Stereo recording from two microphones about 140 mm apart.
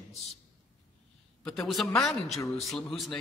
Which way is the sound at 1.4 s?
Centre (ahead or behind).